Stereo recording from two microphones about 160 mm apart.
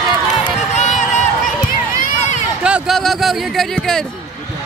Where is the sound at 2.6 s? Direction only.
5° right (ahead or behind).